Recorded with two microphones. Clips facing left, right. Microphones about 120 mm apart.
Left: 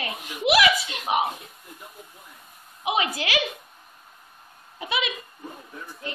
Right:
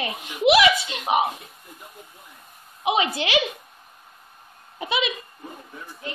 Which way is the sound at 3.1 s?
25° right (ahead or behind).